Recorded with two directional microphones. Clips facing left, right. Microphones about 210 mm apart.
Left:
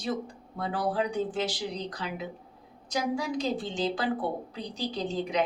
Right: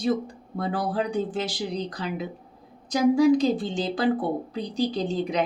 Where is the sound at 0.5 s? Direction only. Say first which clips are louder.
Right 3 dB; 40° right (ahead or behind).